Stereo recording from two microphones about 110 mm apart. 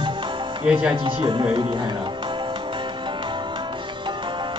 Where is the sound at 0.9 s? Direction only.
50° right (ahead or behind).